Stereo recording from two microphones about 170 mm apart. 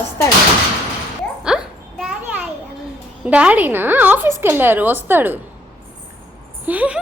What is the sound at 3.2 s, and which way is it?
A woman's voice, 10° right (ahead or behind).